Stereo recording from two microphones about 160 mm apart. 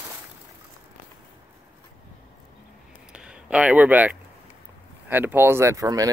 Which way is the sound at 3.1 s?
5° right (ahead or behind).